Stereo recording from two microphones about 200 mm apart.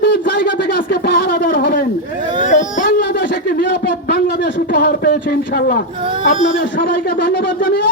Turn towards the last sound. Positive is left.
turn(degrees=55)  # may be behind; listen again after turning